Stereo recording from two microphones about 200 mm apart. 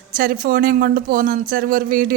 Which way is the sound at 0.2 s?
45° right (ahead or behind).